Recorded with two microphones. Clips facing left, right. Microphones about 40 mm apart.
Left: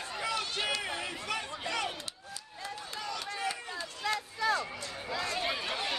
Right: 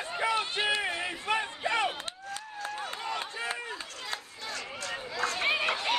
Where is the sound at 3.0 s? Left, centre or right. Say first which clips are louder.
Even; right.